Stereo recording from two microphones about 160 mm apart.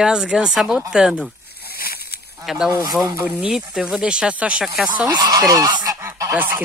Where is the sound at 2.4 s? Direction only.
Centre (ahead or behind).